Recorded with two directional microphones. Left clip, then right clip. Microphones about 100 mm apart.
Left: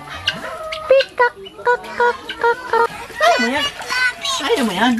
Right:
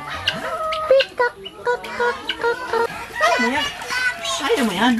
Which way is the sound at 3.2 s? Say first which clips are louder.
Left 3 dB; 20° left (ahead or behind).